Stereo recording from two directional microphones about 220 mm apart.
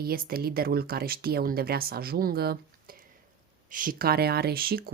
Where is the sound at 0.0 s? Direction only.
45° right (ahead or behind).